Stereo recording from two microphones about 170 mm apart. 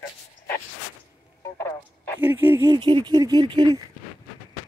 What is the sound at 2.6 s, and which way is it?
Speech, 30° right (ahead or behind).